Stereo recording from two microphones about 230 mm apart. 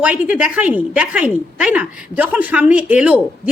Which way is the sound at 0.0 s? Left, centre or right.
Centre.